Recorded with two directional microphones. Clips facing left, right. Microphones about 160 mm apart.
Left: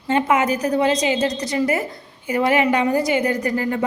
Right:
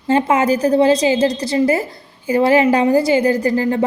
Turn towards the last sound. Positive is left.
turn(degrees=-30)  # may be behind; listen again after turning